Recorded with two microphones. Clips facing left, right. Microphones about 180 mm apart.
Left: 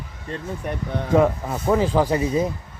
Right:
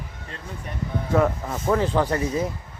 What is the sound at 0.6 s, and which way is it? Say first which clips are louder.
Speech: left 8 dB; 60° left (ahead or behind).